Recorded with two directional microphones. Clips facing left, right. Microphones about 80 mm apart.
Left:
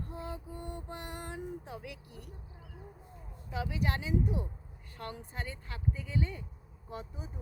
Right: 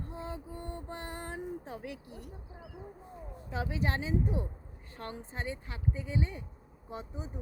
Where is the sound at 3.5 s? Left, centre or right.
Right.